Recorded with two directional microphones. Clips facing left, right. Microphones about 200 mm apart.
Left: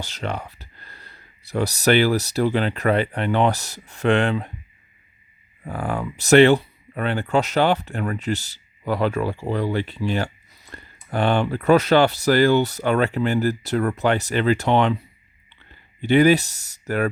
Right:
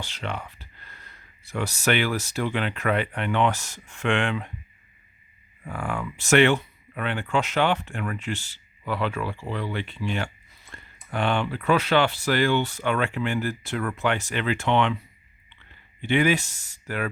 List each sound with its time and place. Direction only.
0.0 s speech: 40° left (ahead or behind)
5.6 s speech: 35° left (ahead or behind)